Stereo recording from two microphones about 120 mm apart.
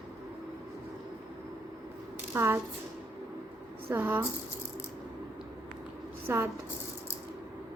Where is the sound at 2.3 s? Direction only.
20° right (ahead or behind).